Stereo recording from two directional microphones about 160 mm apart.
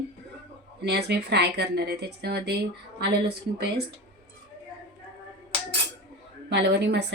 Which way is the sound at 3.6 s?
90° right.